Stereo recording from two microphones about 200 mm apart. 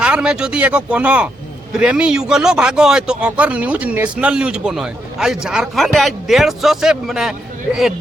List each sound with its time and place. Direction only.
0.0 s speech: 5° right (ahead or behind)